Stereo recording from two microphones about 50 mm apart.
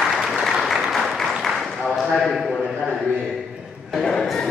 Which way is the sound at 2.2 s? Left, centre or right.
Centre.